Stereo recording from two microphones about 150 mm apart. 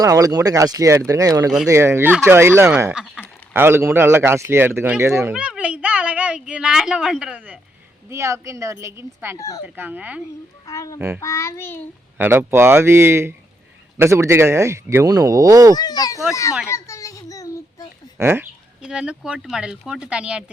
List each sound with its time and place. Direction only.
0.0 s a woman's voice: 25° right (ahead or behind); by 7.6 s 10° right (ahead or behind)
8.1 s speech: 20° right (ahead or behind)
9.4 s a child's voice: 20° left (ahead or behind)
9.6 s speech: 10° right (ahead or behind)
10.7 s a child's voice: 20° left (ahead or behind)
10.9 s speech: 15° right (ahead or behind)
11.2 s a child's voice: 20° left (ahead or behind)
12.1 s speech: 15° right (ahead or behind)
15.7 s a child's voice: 25° left (ahead or behind)
16.6 s a sound: 20° left (ahead or behind)
18.2 s speech: 15° right (ahead or behind)